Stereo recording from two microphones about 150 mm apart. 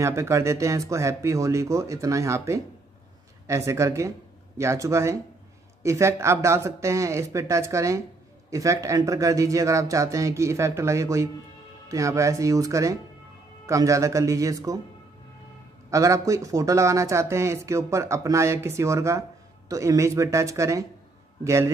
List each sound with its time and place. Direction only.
0.0 s speech: 20° right (ahead or behind)
15.9 s speech: 20° right (ahead or behind)